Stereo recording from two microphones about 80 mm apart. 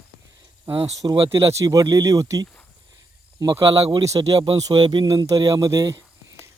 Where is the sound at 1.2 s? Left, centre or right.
Right.